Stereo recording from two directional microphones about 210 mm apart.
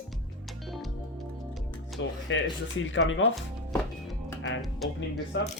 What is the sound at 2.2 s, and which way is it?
Speech, 65° left (ahead or behind).